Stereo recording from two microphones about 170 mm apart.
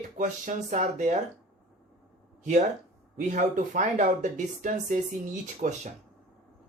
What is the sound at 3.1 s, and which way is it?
Speech, 50° right (ahead or behind).